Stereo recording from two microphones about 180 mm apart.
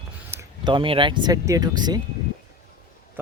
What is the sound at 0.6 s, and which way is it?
Speech, 25° right (ahead or behind).